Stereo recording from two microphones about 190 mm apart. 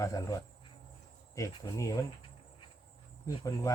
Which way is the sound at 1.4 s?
15° left (ahead or behind).